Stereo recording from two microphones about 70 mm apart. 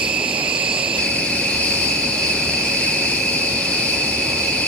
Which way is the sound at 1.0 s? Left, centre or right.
Centre.